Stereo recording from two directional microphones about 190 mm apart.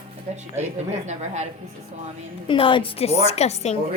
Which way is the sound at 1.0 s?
35° right (ahead or behind).